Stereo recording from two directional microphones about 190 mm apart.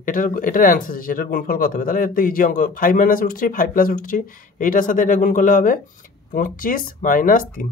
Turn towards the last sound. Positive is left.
turn(degrees=45)  # may be behind; listen again after turning